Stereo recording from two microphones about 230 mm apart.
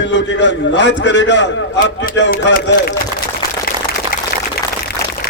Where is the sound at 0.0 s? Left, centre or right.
Left.